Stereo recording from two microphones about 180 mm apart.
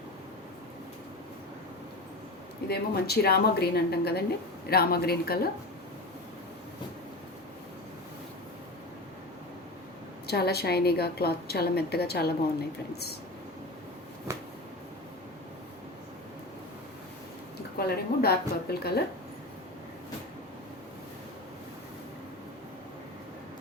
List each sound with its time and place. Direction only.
2.6 s a woman's voice: 60° left (ahead or behind)
10.2 s a woman's voice: 60° left (ahead or behind)
14.3 s a sound: 15° right (ahead or behind)
17.7 s a woman's voice: 60° left (ahead or behind)